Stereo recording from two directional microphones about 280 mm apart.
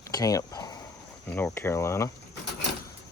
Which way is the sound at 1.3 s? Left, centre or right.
Centre.